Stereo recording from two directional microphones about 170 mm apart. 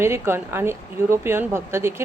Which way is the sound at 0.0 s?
15° right (ahead or behind).